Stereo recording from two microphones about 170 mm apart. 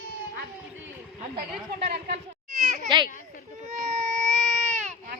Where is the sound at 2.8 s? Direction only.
25° right (ahead or behind).